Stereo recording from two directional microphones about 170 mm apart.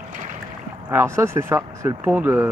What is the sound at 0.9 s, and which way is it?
Speech, 15° right (ahead or behind).